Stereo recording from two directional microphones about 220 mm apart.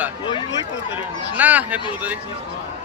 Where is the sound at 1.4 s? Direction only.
5° right (ahead or behind).